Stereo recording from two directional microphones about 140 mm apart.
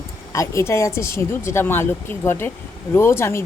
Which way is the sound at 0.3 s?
20° left (ahead or behind).